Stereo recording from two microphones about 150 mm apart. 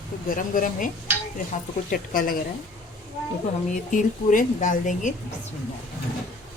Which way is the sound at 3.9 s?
60° left (ahead or behind).